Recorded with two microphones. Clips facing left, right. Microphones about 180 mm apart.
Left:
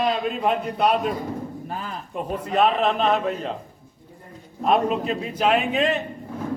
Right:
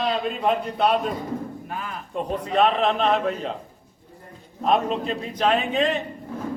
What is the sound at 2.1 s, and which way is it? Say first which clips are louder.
Speech: right 1 dB; 5° left (ahead or behind).